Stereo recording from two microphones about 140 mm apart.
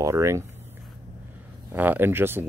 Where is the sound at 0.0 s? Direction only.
20° right (ahead or behind).